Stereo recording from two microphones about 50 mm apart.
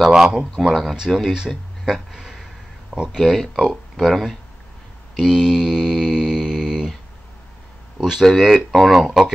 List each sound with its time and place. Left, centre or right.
0.0 s speech: centre
0.9 s speech: centre
5.1 s mantra: centre
8.0 s speech: centre